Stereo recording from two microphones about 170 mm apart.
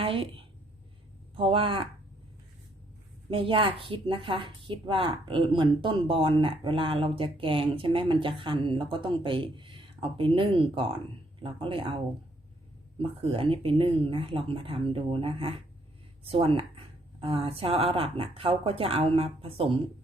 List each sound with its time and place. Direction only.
0.0 s a woman's voice: 30° right (ahead or behind)
3.2 s a woman's voice: 30° right (ahead or behind)
13.0 s a woman's voice: 30° right (ahead or behind)